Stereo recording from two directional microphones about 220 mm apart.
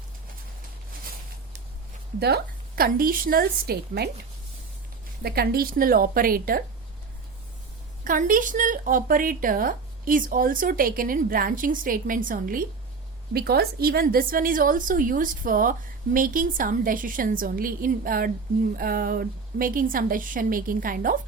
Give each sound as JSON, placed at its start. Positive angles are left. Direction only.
{"t": 2.1, "sound": "a woman's voice", "side_deg": -45}
{"t": 5.2, "sound": "speech", "side_deg": -45}
{"t": 8.0, "sound": "speech", "side_deg": -40}